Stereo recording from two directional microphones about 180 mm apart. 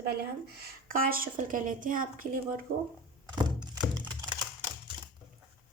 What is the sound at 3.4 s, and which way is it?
Music, 25° right (ahead or behind).